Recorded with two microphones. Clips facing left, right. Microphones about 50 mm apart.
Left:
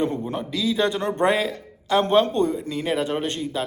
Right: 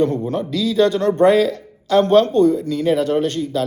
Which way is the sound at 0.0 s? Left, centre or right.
Centre.